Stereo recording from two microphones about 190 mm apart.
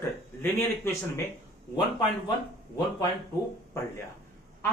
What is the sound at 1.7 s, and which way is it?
Speech, 25° left (ahead or behind).